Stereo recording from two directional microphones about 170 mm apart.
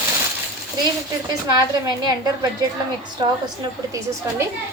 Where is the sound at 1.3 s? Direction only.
25° right (ahead or behind).